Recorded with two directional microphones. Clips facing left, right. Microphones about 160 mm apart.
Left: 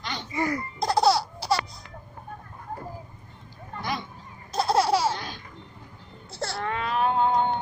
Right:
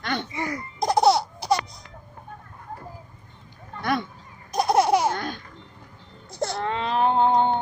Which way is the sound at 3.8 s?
60° right (ahead or behind).